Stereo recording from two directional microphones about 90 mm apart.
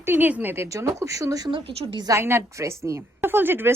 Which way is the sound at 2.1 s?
30° right (ahead or behind).